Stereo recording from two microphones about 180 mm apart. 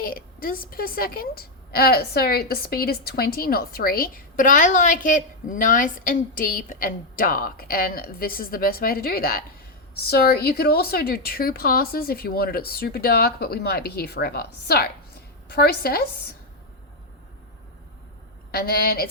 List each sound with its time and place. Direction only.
0.0 s a woman's voice: 55° left (ahead or behind)
18.5 s a woman's voice: 60° left (ahead or behind)